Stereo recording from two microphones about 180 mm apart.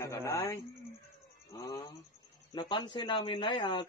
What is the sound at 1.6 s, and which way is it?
A man's voice, 20° left (ahead or behind).